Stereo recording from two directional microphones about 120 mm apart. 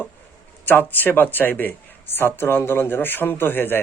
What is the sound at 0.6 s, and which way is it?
A man's voice, 15° left (ahead or behind).